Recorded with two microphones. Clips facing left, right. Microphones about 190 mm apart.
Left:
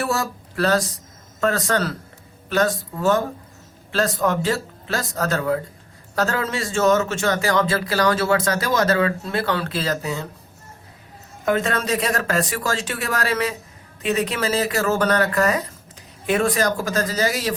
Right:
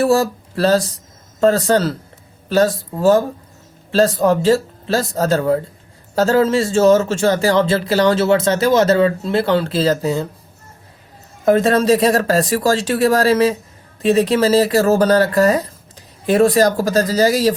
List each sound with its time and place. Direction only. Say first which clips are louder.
0.0 s speech: right 9 dB; 30° right (ahead or behind)
11.4 s speech: right 9 dB; 35° right (ahead or behind)